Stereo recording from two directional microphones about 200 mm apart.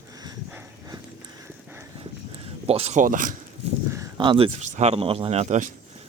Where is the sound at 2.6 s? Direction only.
30° right (ahead or behind).